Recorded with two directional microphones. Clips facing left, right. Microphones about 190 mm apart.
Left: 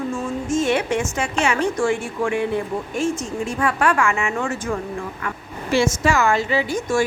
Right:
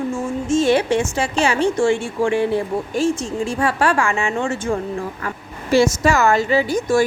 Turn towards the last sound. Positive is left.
turn(degrees=-35)  # may be behind; listen again after turning